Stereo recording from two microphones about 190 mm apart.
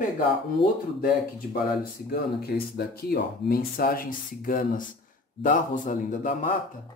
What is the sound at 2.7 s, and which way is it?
Speech, 55° left (ahead or behind).